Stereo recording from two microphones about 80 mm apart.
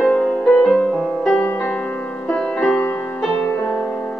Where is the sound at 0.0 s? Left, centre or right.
Centre.